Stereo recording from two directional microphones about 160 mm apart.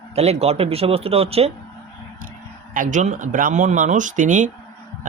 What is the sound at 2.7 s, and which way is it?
Speech, 55° right (ahead or behind).